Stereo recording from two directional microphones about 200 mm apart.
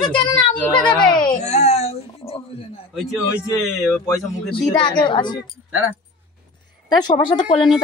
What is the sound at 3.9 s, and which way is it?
Speech, 10° left (ahead or behind).